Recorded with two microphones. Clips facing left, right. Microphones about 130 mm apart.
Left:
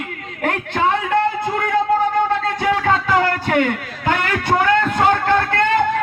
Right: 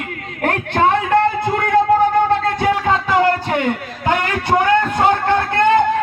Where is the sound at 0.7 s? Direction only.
55° right (ahead or behind).